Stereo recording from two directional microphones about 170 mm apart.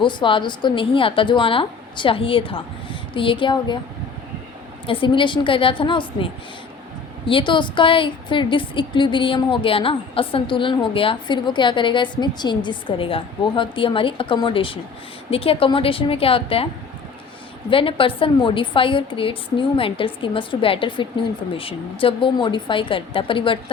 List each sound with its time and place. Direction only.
0.0 s a woman's voice: 30° left (ahead or behind)
4.9 s a woman's voice: 30° left (ahead or behind)
17.7 s a woman's voice: 30° left (ahead or behind)